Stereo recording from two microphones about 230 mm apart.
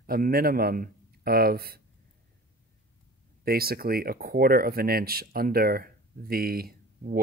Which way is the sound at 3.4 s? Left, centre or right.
Right.